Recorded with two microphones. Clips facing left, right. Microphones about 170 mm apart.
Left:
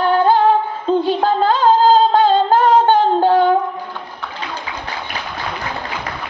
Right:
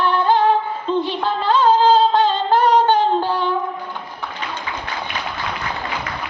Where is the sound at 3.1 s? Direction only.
45° left (ahead or behind).